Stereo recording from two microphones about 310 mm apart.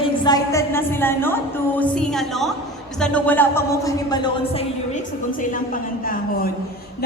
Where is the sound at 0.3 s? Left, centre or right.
Centre.